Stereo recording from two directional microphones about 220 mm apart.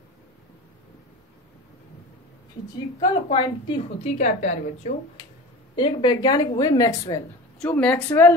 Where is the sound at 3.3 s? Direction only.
25° left (ahead or behind).